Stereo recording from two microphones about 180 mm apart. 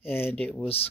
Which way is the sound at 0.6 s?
35° left (ahead or behind).